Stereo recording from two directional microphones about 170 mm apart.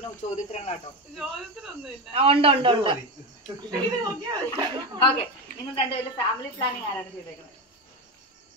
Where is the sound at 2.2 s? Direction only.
35° right (ahead or behind).